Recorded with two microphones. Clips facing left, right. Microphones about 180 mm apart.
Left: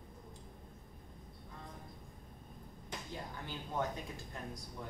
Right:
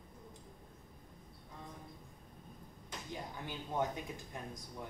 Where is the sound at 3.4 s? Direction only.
15° right (ahead or behind).